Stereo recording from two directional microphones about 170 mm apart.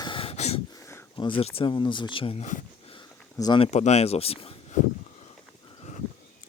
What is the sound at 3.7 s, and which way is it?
Speech, 40° left (ahead or behind).